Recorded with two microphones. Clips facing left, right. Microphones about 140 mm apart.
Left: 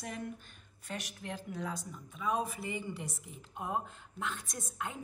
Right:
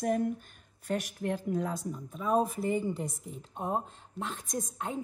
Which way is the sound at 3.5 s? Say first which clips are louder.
Right 4 dB; 35° right (ahead or behind).